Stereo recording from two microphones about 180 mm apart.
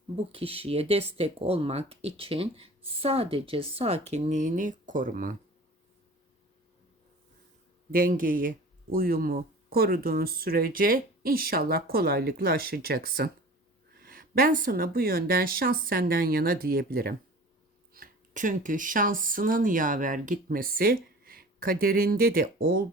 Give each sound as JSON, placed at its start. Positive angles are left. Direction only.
{"t": 0.3, "sound": "speech", "side_deg": -30}
{"t": 7.9, "sound": "speech", "side_deg": -50}